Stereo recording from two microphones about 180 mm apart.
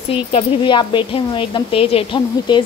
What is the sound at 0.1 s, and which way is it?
Speech, 30° left (ahead or behind).